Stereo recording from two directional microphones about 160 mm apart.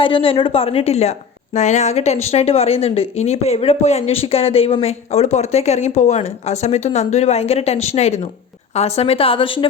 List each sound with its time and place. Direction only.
0.0 s a woman's voice: 35° left (ahead or behind)